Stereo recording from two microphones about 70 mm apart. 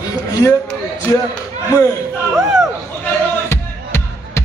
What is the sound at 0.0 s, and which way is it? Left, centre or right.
Speech, left.